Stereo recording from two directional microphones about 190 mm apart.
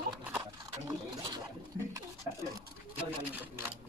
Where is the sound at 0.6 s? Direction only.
20° right (ahead or behind).